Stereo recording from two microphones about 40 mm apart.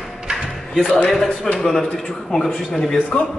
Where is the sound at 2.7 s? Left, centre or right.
Centre.